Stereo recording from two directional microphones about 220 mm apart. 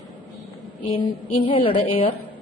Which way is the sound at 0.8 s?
25° left (ahead or behind).